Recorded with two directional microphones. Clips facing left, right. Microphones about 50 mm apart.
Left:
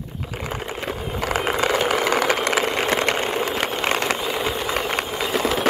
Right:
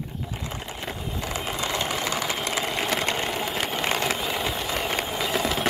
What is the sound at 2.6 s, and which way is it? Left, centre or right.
Sewing machine, left.